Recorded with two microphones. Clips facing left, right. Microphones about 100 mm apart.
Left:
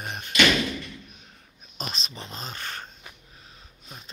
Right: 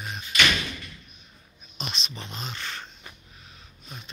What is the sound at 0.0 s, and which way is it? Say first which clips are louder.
Door: left 1 dB; 50° left (ahead or behind).